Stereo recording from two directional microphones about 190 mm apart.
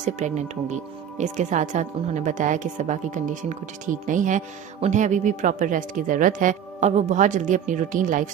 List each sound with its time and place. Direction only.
0.0 s speech: 40° right (ahead or behind)